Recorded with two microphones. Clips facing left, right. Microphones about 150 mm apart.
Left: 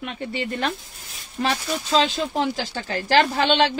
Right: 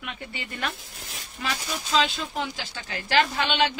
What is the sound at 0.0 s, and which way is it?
Speech, 35° left (ahead or behind).